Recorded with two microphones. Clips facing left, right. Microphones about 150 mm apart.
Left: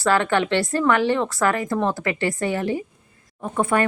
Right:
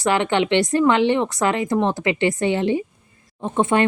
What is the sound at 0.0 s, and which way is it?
Speech, 20° right (ahead or behind).